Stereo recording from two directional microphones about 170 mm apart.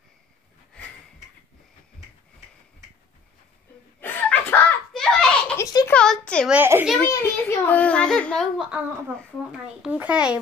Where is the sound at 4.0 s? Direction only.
10° left (ahead or behind).